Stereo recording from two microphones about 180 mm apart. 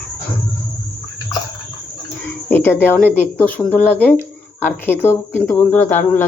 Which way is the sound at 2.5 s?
10° left (ahead or behind).